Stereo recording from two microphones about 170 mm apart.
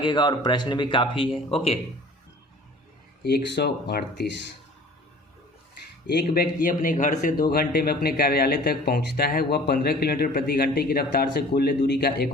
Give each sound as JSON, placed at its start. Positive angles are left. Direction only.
{"t": 0.0, "sound": "speech", "side_deg": 25}
{"t": 3.2, "sound": "speech", "side_deg": 70}
{"t": 6.1, "sound": "speech", "side_deg": 65}
{"t": 7.5, "sound": "speech", "side_deg": 65}